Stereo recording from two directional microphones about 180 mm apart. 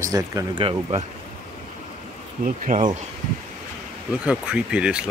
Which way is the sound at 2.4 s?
45° right (ahead or behind).